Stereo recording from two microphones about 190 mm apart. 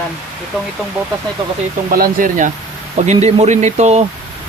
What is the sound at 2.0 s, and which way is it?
Speech, 45° right (ahead or behind).